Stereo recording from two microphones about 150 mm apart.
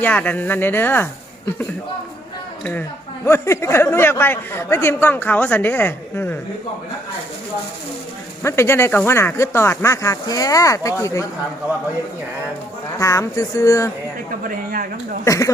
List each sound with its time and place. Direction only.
0.0 s a man's voice: 10° left (ahead or behind)
3.2 s a man's voice: 20° left (ahead or behind)
8.4 s speech: 15° left (ahead or behind)
13.0 s speech: 20° left (ahead or behind)
14.4 s a man's voice: 70° right (ahead or behind)
15.2 s speech: 20° left (ahead or behind)